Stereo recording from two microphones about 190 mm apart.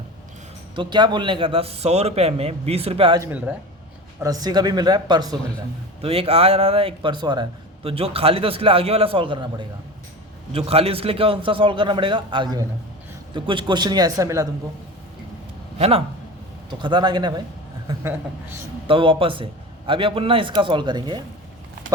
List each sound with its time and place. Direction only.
0.8 s a man's voice: 25° right (ahead or behind)
3.2 s speech: 10° right (ahead or behind)
4.2 s a man's voice: 20° right (ahead or behind)
15.8 s a man's voice: 30° right (ahead or behind)
18.9 s a man's voice: 30° right (ahead or behind)